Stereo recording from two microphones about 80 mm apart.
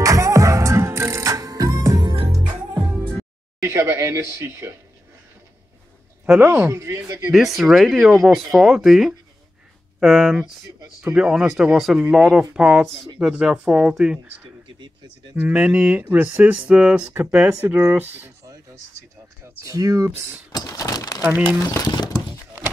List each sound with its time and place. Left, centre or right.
0.0 s music: right
3.6 s a sound: right
6.4 s speech: right
7.3 s speech: centre
15.3 s speech: centre
19.6 s speech: right
20.6 s speech: left
21.2 s speech: right
21.6 s speech: left